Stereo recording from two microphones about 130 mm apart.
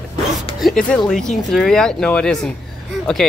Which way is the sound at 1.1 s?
5° left (ahead or behind).